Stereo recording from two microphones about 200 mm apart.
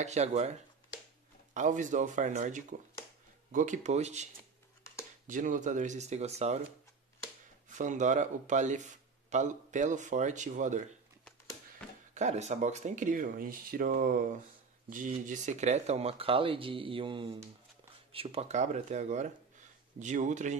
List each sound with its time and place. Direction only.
0.0 s speech: 35° right (ahead or behind)
7.7 s speech: 40° right (ahead or behind)
12.1 s speech: 35° right (ahead or behind)